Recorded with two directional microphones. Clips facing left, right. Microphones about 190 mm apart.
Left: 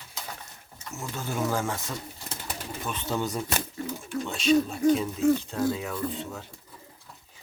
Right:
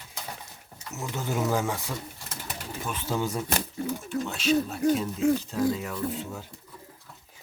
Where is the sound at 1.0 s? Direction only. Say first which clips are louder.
Right 1 dB; 15° right (ahead or behind).